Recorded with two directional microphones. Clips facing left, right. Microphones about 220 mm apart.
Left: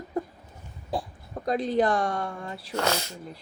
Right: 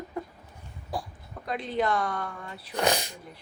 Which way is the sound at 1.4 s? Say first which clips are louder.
Left 5 dB; 35° left (ahead or behind).